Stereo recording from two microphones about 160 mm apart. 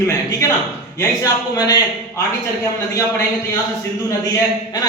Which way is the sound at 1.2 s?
25° left (ahead or behind).